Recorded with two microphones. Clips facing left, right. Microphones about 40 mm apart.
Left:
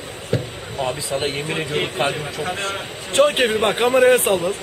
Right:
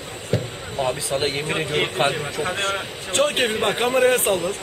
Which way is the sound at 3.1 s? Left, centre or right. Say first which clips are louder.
Left 4 dB; centre.